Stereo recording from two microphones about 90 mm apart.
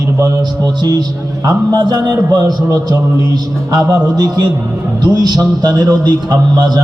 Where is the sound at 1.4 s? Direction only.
50° right (ahead or behind).